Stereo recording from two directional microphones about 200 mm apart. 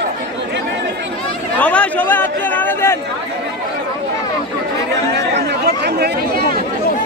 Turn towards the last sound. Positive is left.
turn(degrees=-55)  # may be behind; listen again after turning